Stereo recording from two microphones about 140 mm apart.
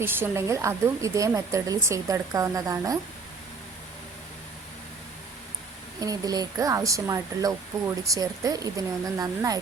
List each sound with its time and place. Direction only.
0.0 s speech: 15° right (ahead or behind)
6.0 s speech: 25° right (ahead or behind)